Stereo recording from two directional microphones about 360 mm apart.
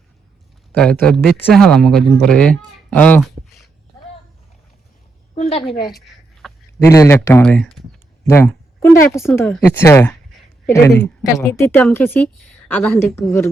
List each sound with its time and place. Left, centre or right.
0.7 s a woman's voice: centre
5.3 s a woman's voice: centre